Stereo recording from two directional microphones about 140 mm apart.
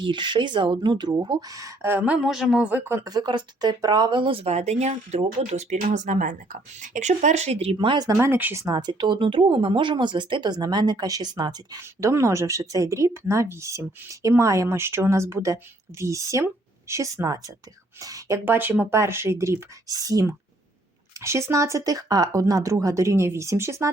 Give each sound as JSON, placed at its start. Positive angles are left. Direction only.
{"t": 0.0, "sound": "speech", "side_deg": -35}
{"t": 2.2, "sound": "speech", "side_deg": -5}
{"t": 8.1, "sound": "speech", "side_deg": -15}
{"t": 8.6, "sound": "speech", "side_deg": -30}